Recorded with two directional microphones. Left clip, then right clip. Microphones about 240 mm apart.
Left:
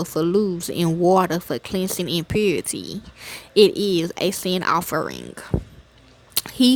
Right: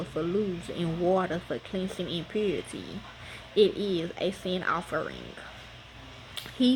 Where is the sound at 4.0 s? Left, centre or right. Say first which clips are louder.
Left 8 dB; left.